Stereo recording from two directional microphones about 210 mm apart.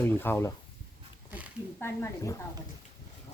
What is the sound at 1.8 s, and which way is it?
Speech, 10° left (ahead or behind).